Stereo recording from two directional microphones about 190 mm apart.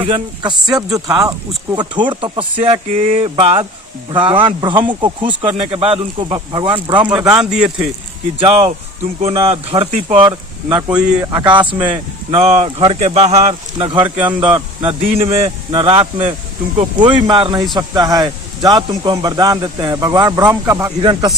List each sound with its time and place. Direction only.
0.0 s speech: 25° right (ahead or behind)
7.3 s speech: 5° right (ahead or behind)
8.4 s speech: 30° right (ahead or behind)
10.2 s speech: 25° right (ahead or behind)
14.2 s speech: 10° right (ahead or behind)
15.2 s speech: 30° right (ahead or behind)